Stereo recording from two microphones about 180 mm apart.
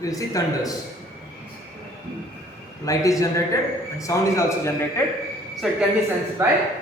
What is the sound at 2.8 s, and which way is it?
A man's voice, 20° left (ahead or behind).